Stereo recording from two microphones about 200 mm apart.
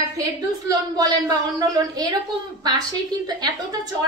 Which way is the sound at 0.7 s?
20° right (ahead or behind).